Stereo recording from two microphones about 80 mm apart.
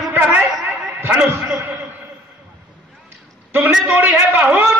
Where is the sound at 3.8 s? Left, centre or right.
Right.